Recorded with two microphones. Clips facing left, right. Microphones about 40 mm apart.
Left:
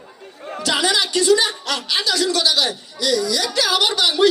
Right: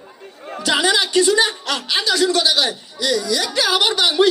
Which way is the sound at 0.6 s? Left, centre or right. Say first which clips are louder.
Right 2 dB; right.